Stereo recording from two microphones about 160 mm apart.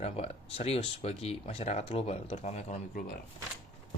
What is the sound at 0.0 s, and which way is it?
Speech, 40° left (ahead or behind).